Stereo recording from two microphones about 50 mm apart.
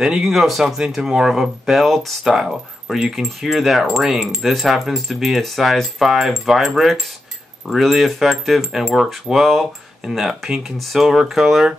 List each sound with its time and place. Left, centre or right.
0.0 s speech: centre